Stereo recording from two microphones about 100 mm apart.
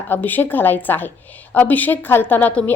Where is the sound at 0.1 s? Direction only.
20° left (ahead or behind).